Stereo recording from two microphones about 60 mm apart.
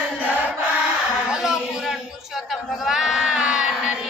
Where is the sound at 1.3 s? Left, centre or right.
Centre.